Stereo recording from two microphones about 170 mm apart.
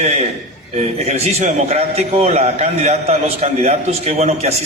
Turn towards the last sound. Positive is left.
turn(degrees=-40)  # may be behind; listen again after turning